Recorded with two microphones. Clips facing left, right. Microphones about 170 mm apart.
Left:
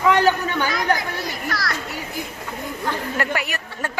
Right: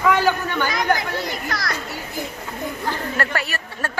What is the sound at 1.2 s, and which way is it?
Speech, 20° right (ahead or behind).